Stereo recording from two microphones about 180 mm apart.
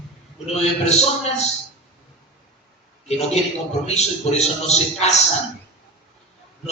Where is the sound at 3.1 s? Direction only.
35° left (ahead or behind).